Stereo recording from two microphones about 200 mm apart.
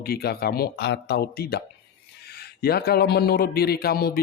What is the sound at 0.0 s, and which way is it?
A man's voice, 50° left (ahead or behind).